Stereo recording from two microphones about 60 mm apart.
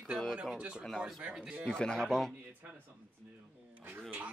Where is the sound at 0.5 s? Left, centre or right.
Centre.